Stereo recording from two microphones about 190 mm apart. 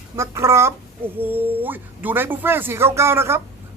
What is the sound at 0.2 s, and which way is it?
Speech, 15° right (ahead or behind).